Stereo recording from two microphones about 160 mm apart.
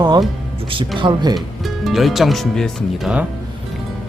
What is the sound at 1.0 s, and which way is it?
Speech, 30° right (ahead or behind).